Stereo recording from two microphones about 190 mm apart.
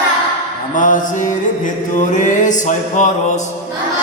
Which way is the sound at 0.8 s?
40° left (ahead or behind).